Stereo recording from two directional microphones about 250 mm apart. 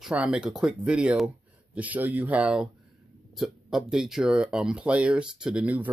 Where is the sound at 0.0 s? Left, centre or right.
Centre.